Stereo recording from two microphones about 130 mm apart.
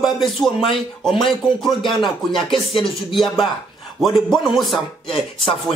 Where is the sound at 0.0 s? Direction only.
Centre (ahead or behind).